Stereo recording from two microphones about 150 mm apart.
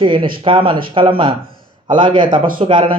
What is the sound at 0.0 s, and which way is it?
Speech, 35° right (ahead or behind).